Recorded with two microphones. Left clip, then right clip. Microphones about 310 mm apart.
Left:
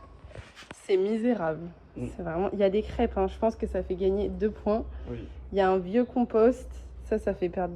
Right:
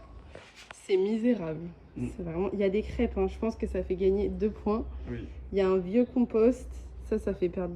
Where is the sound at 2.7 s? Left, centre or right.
Centre.